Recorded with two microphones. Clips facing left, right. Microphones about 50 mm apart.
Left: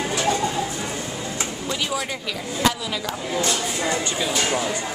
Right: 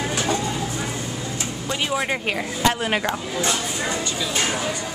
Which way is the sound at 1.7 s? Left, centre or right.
Right.